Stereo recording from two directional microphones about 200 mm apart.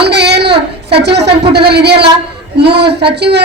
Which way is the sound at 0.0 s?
55° right (ahead or behind).